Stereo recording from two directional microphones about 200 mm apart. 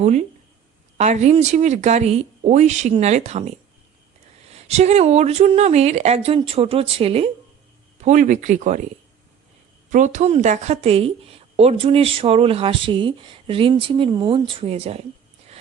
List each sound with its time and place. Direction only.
0.0 s speech: 35° right (ahead or behind)
9.9 s a woman's voice: 40° right (ahead or behind)